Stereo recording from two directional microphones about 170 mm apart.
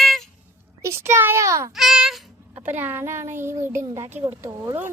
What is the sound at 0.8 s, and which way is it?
Speech, 15° right (ahead or behind).